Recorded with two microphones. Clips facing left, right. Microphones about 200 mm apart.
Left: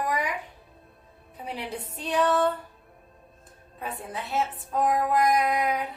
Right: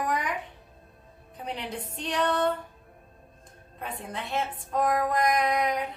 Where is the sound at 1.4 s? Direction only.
10° left (ahead or behind).